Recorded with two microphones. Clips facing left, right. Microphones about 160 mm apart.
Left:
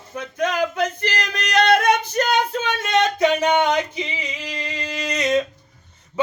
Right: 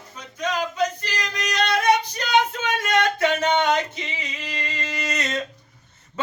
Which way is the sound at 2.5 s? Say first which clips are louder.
Left 1 dB; 30° left (ahead or behind).